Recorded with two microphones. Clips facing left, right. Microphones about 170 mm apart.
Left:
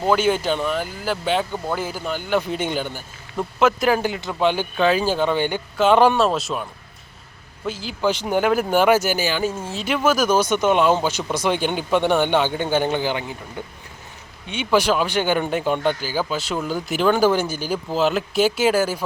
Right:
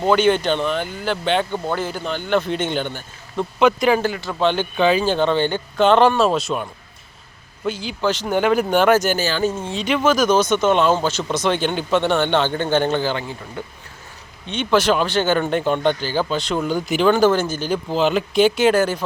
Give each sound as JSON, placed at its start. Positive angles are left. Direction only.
{"t": 0.0, "sound": "speech", "side_deg": 5}
{"t": 4.0, "sound": "speech", "side_deg": 20}
{"t": 8.0, "sound": "speech", "side_deg": 10}
{"t": 14.4, "sound": "speech", "side_deg": 10}